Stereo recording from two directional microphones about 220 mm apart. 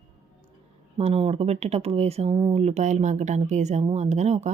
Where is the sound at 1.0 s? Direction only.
25° right (ahead or behind).